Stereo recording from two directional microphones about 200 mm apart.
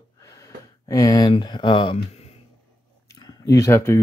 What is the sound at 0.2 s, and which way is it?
Speech, 15° left (ahead or behind).